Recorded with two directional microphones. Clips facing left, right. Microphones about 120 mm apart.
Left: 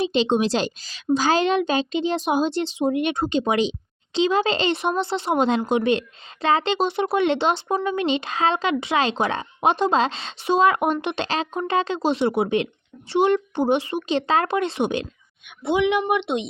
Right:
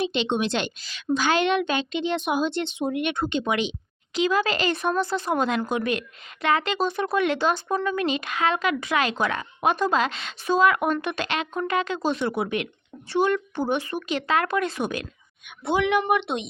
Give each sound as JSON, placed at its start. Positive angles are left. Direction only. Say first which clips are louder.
{"t": 0.0, "sound": "a woman's voice", "louder": "left 4 dB", "side_deg": 35}